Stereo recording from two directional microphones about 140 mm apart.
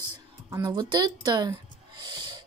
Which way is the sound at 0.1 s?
25° right (ahead or behind).